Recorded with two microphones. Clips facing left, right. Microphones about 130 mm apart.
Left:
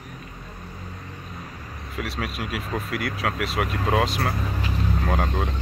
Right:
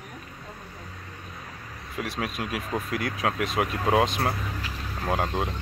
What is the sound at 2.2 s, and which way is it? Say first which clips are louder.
Speech: right 1 dB; 20° right (ahead or behind).